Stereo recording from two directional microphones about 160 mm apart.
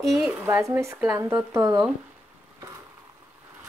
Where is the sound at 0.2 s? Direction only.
10° right (ahead or behind).